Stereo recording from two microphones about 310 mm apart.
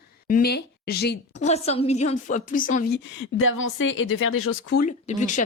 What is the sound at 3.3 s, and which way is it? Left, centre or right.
A woman's voice, left.